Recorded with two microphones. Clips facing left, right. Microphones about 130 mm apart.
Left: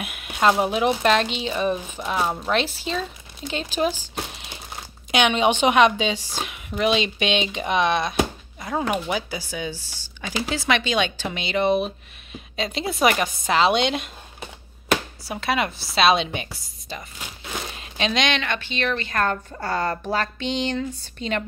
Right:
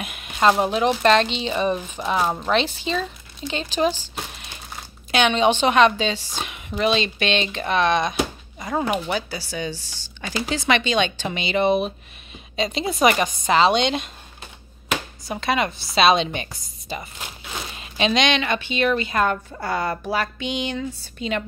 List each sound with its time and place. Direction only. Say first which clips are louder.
0.0 s speech: right 1 dB; 5° left (ahead or behind)
15.2 s speech: right 2 dB; 5° left (ahead or behind)
16.9 s speech: right 3 dB; 5° right (ahead or behind)